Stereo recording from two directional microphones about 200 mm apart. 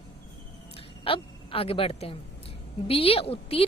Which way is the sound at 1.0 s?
25° left (ahead or behind).